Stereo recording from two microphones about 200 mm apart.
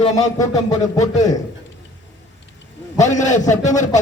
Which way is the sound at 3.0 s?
35° left (ahead or behind).